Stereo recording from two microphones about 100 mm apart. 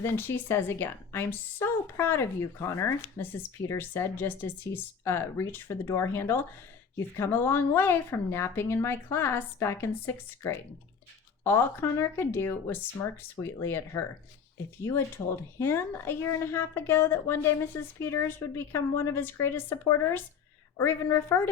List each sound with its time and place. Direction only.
0.0 s a woman's voice: 25° left (ahead or behind)